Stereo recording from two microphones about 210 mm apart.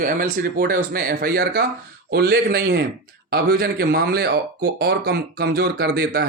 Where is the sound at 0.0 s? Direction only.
40° right (ahead or behind).